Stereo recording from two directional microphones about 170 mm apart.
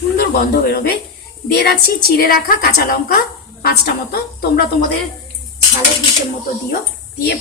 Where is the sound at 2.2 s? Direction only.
60° left (ahead or behind).